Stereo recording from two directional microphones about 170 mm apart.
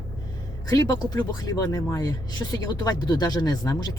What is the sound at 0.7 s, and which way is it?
Speech, 20° left (ahead or behind).